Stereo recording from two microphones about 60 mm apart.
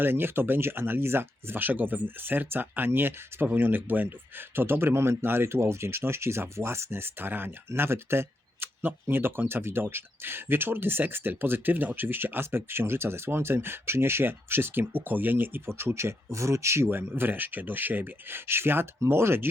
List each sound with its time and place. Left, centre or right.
0.0 s speech: right